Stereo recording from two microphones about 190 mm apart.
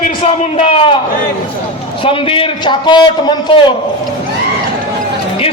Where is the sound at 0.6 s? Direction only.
30° left (ahead or behind).